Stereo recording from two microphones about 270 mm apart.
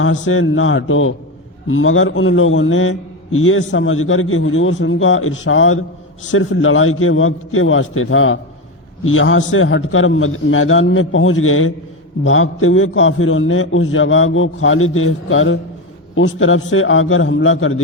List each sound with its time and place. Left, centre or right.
0.0 s a man's voice: left